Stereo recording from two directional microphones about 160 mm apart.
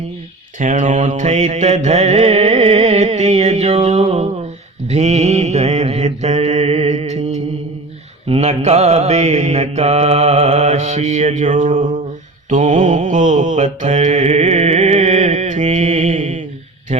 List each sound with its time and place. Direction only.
0.6 s mantra: 50° right (ahead or behind)
16.9 s a man's voice: 40° right (ahead or behind)